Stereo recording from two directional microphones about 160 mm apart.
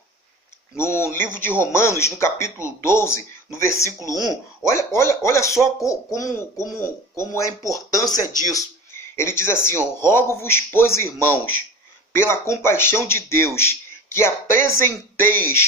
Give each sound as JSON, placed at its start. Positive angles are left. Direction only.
{"t": 0.8, "sound": "a man's voice", "side_deg": 15}